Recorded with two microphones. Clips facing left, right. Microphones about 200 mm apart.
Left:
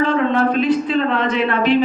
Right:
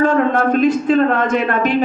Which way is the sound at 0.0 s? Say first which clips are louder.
Right 2 dB; 45° right (ahead or behind).